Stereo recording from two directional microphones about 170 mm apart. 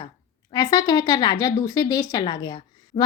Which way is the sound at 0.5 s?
25° left (ahead or behind).